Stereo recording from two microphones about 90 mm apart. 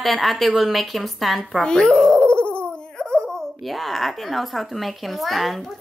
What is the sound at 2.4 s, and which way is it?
Baby laughter, 25° right (ahead or behind).